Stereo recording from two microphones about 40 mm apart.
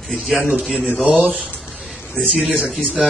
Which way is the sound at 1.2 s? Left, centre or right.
Right.